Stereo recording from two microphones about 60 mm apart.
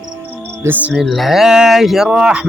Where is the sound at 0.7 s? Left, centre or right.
Right.